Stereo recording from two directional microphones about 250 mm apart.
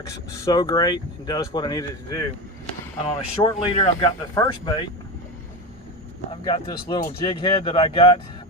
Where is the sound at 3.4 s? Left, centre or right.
Centre.